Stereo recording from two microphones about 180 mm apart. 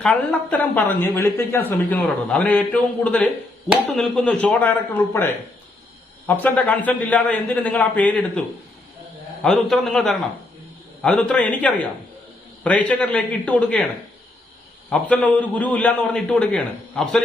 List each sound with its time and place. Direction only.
0.0 s a woman's voice: 5° left (ahead or behind)
14.8 s a man's voice: 5° left (ahead or behind)